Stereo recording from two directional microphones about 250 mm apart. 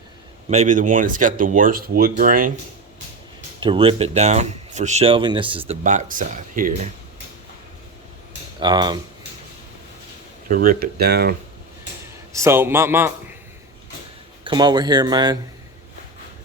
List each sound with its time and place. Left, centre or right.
0.5 s speech: right
3.6 s speech: right
8.6 s speech: centre
10.5 s speech: right
12.3 s speech: centre
14.4 s speech: centre